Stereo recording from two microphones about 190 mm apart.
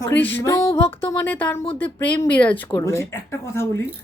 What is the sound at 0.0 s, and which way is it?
Speech, 10° left (ahead or behind).